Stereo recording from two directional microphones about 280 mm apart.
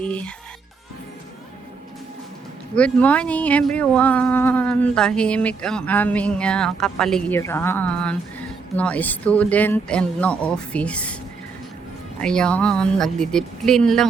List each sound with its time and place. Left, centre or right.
0.0 s speech: centre
2.7 s speech: centre
12.2 s speech: centre